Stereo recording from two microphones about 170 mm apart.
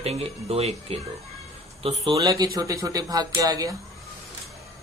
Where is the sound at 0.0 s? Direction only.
35° right (ahead or behind).